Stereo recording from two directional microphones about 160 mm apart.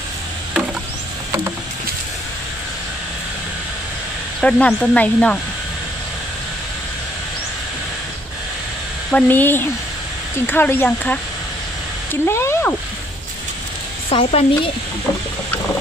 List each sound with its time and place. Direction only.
4.4 s speech: 5° left (ahead or behind)
9.1 s speech: 10° left (ahead or behind)
14.0 s speech: 35° left (ahead or behind)